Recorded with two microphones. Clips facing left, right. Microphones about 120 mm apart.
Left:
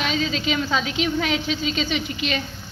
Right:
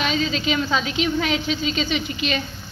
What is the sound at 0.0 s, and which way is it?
A woman's voice, centre (ahead or behind).